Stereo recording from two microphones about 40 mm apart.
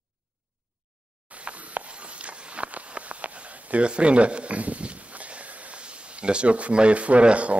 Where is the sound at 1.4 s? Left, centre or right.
Right.